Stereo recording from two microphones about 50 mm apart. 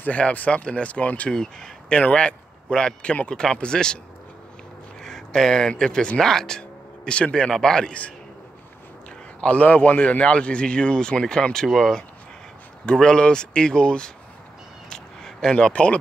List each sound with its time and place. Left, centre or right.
0.0 s a man's voice: left
1.3 s speech: centre
1.9 s speech: left
5.0 s speech: centre
7.1 s a man's voice: left
9.4 s a man's voice: left; by 12.0 s centre
12.8 s speech: centre
14.9 s a sound: centre
15.5 s a man's voice: left